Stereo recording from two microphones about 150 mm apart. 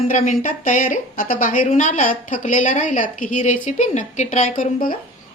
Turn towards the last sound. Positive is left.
turn(degrees=65)  # may be behind; listen again after turning